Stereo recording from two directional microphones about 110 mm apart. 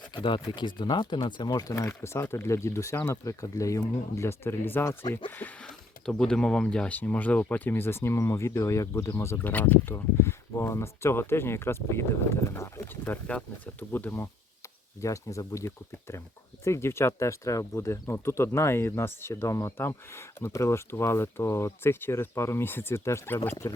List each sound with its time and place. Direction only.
0.1 s speech: 50° left (ahead or behind)
1.7 s speech: 20° left (ahead or behind)
13.1 s speech: 10° left (ahead or behind)